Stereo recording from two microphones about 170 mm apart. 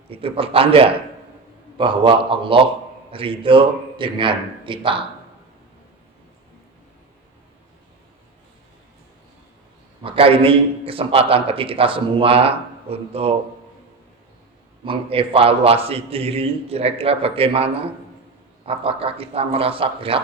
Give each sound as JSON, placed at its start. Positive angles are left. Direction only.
{"t": 0.1, "sound": "a man's voice", "side_deg": -35}
{"t": 10.0, "sound": "a man's voice", "side_deg": -30}
{"t": 14.8, "sound": "a man's voice", "side_deg": -35}